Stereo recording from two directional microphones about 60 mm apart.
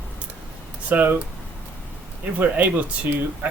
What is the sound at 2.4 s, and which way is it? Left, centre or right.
Speech, right.